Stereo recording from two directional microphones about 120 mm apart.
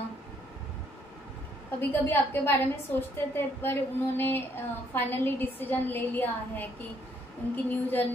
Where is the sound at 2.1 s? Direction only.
15° left (ahead or behind).